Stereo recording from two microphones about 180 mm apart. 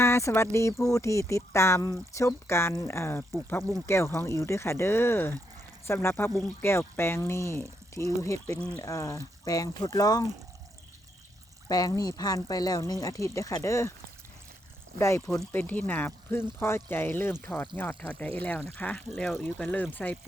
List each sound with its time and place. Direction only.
0.0 s speech: 15° left (ahead or behind)
11.7 s speech: 20° left (ahead or behind)
14.9 s speech: 15° left (ahead or behind)